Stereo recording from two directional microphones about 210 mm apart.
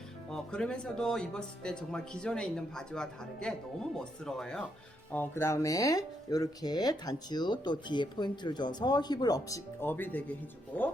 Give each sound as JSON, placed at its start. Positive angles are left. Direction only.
{"t": 0.3, "sound": "speech", "side_deg": 5}